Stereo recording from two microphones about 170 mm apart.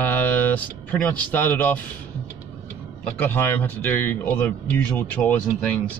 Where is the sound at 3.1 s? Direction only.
10° left (ahead or behind).